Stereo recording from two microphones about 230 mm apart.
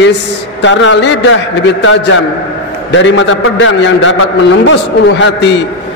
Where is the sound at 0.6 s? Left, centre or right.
Left.